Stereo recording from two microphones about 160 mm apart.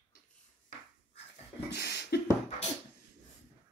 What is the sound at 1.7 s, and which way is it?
Beatboxing, 90° left.